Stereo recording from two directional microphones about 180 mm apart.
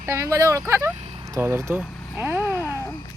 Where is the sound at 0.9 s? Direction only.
35° right (ahead or behind).